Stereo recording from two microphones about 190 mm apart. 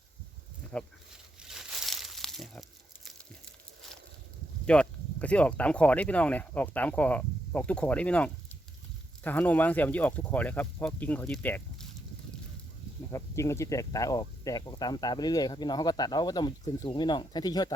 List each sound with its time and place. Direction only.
0.7 s speech: 5° left (ahead or behind)
1.4 s crumpling: centre (ahead or behind)
4.6 s speech: 5° left (ahead or behind)
13.1 s speech: 15° left (ahead or behind)